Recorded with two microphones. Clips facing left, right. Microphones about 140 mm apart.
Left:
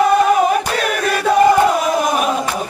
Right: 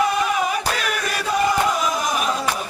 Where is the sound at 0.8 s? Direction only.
55° left (ahead or behind).